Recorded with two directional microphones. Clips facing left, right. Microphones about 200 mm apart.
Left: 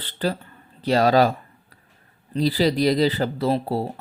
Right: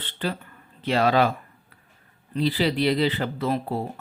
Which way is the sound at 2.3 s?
40° left (ahead or behind).